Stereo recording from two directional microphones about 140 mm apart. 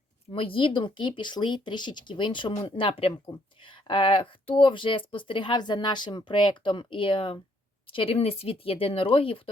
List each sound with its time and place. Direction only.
0.3 s speech: 40° left (ahead or behind)